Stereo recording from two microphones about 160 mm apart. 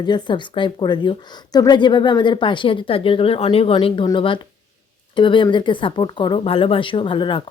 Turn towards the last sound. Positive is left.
turn(degrees=30)  # may be behind; listen again after turning